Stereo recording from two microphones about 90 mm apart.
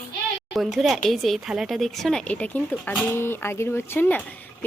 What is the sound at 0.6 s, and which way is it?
A woman's voice, centre (ahead or behind).